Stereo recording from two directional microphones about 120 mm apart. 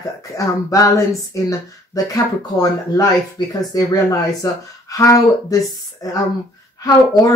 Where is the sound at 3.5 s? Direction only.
30° left (ahead or behind).